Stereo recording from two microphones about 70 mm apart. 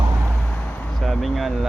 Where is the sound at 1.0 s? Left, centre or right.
Centre.